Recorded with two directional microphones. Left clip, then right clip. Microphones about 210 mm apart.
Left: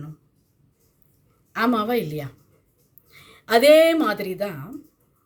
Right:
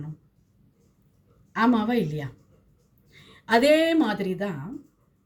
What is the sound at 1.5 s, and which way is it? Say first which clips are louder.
A woman's voice: left 2 dB; 5° left (ahead or behind).